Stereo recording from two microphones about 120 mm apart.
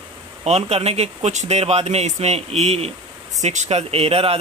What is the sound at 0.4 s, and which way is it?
Speech, 60° right (ahead or behind).